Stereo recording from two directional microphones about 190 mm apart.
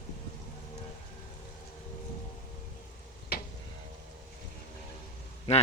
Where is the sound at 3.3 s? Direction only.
55° left (ahead or behind).